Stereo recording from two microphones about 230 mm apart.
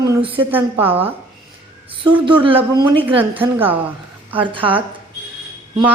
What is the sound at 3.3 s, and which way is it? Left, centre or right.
Speech, centre.